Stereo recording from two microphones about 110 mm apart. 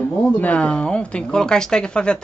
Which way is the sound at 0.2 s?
10° left (ahead or behind).